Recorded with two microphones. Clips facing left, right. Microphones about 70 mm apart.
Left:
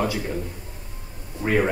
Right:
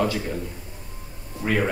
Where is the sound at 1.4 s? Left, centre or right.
Centre.